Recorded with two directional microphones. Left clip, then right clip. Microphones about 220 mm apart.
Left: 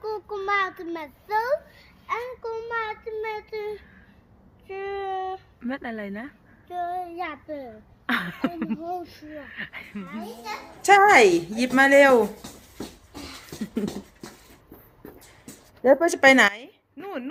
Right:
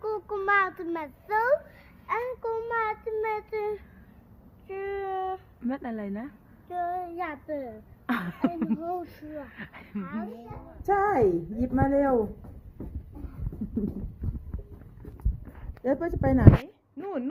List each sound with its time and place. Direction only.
0.0 s child singing: centre (ahead or behind)
2.0 s a child's voice: 5° right (ahead or behind)
4.7 s child singing: centre (ahead or behind)
5.5 s speech: 10° left (ahead or behind)
6.7 s child singing: centre (ahead or behind)
8.0 s speech: 10° left (ahead or behind)
8.8 s a child's voice: 10° right (ahead or behind)
9.3 s speech: 15° left (ahead or behind)
10.8 s a woman's voice: 15° left (ahead or behind)
15.8 s a woman's voice: 20° left (ahead or behind)
16.6 s a sound: centre (ahead or behind)